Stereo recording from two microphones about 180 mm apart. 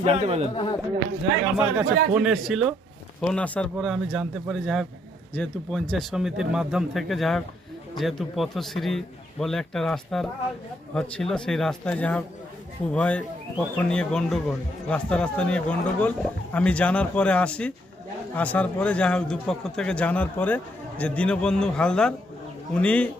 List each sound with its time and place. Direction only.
0.0 s speech: 35° right (ahead or behind)
0.5 s speech: 25° left (ahead or behind)
1.5 s a man's voice: 5° right (ahead or behind)